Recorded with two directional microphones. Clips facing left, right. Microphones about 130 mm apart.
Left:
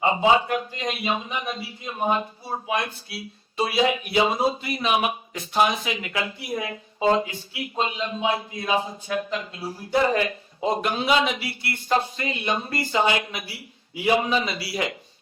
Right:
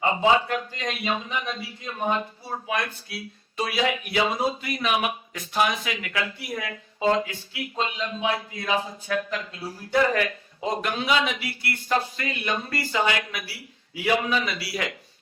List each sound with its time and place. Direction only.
0.0 s a man's voice: 20° left (ahead or behind)